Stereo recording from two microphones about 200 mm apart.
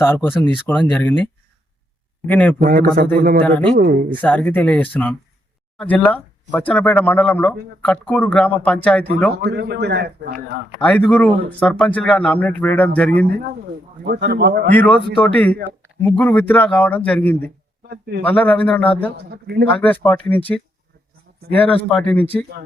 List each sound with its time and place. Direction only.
0.0 s speech: 10° left (ahead or behind)
2.6 s speech: 45° right (ahead or behind)
3.4 s speech: 5° left (ahead or behind)
9.3 s a man's voice: 55° right (ahead or behind)
10.8 s speech: 5° left (ahead or behind)
14.0 s a man's voice: 55° right (ahead or behind)
14.7 s speech: 5° left (ahead or behind)
17.8 s speech: 50° right (ahead or behind)
18.2 s speech: 10° left (ahead or behind)
19.1 s speech: 50° right (ahead or behind)
19.7 s speech: 10° left (ahead or behind)
21.5 s speech: 10° left (ahead or behind)